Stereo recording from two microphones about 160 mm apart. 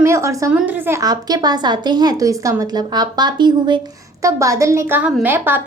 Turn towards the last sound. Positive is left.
turn(degrees=-10)  # may be behind; listen again after turning